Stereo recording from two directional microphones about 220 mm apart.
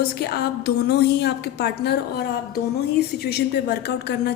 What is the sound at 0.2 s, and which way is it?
A woman's voice, 45° left (ahead or behind).